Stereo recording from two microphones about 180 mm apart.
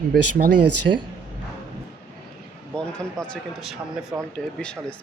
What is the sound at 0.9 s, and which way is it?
Speech, 55° right (ahead or behind).